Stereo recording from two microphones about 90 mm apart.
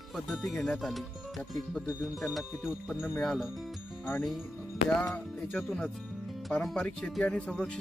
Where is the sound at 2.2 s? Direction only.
5° right (ahead or behind).